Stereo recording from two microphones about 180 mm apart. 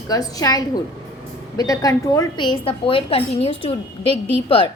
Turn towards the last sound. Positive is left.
turn(degrees=30)  # may be behind; listen again after turning